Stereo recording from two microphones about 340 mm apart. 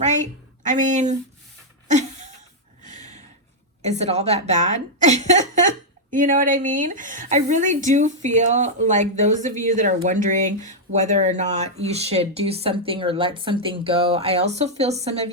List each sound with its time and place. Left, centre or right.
0.6 s a woman's voice: right
1.9 s a sound: right
2.8 s snort: right
3.8 s a woman's voice: centre